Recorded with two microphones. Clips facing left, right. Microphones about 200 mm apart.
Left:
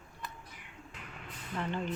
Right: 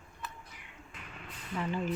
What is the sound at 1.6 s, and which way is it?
Speech, 5° right (ahead or behind).